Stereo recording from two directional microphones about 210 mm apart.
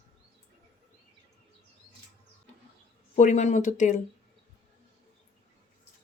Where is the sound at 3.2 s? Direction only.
35° left (ahead or behind).